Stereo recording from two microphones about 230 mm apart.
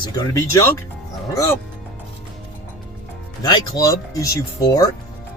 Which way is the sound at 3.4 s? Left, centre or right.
Centre.